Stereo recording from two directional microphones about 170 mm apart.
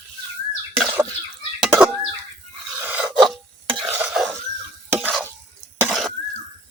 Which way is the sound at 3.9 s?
5° right (ahead or behind).